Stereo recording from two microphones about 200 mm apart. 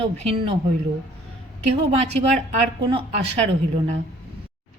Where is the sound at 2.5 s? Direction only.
35° right (ahead or behind).